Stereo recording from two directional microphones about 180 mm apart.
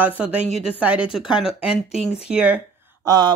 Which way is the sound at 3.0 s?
25° right (ahead or behind).